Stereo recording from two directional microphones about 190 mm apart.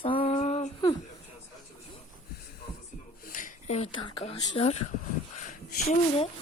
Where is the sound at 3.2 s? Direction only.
45° left (ahead or behind).